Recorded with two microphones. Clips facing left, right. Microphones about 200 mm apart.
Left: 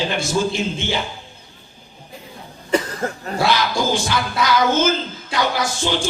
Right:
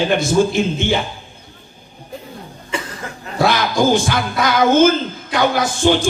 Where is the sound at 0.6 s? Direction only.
55° right (ahead or behind).